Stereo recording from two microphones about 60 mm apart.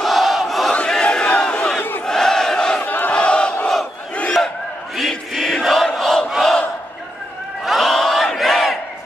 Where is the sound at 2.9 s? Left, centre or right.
Left.